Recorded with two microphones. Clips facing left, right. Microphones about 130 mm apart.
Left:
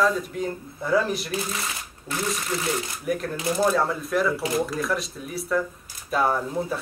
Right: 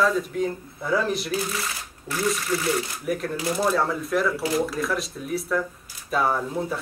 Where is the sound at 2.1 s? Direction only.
20° left (ahead or behind).